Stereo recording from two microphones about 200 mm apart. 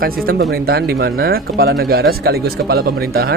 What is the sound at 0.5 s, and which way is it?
Speech, 50° right (ahead or behind).